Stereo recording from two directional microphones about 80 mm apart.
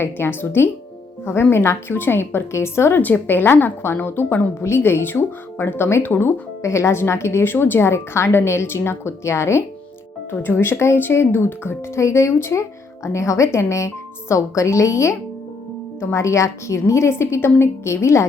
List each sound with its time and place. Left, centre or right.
0.0 s a woman's voice: left
3.0 s a woman's voice: left